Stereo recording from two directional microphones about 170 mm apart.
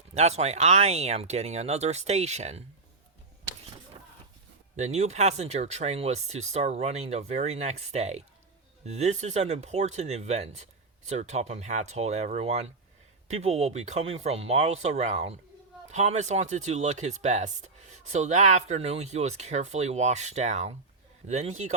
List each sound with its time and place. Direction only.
0.1 s speech: 40° right (ahead or behind)
4.8 s speech: 40° right (ahead or behind)